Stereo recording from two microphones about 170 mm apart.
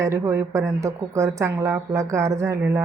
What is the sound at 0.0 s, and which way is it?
A woman's voice, 15° right (ahead or behind).